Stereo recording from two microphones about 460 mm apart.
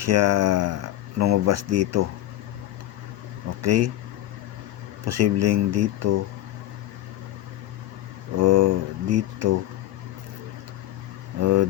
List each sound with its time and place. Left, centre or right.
0.0 s speech: right
3.6 s speech: right
5.0 s speech: right
8.4 s speech: right
11.3 s speech: right